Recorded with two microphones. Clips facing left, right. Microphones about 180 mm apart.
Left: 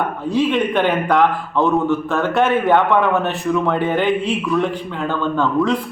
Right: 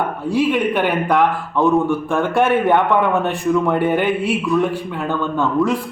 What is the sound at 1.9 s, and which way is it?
A man's voice, 15° right (ahead or behind).